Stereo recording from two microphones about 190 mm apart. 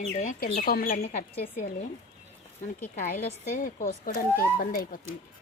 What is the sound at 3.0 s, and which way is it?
A woman's voice, 40° left (ahead or behind).